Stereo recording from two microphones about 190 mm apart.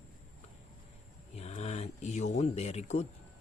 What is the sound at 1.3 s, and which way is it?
Speech, 35° left (ahead or behind).